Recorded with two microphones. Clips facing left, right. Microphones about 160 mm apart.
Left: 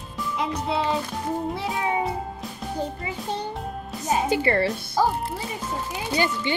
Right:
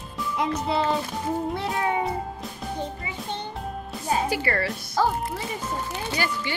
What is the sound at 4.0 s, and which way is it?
Speech, 20° left (ahead or behind).